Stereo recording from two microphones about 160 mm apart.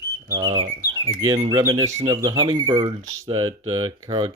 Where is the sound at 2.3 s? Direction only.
30° right (ahead or behind).